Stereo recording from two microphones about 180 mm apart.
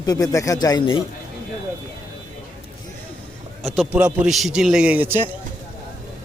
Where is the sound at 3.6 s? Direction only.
5° right (ahead or behind).